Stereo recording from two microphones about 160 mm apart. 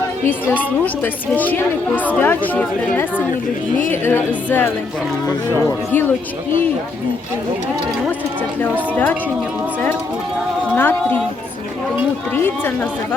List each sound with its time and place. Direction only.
0.3 s speech: 10° left (ahead or behind)
8.6 s speech: 10° left (ahead or behind)
10.8 s a woman's voice: 15° left (ahead or behind)
12.3 s speech: 15° left (ahead or behind)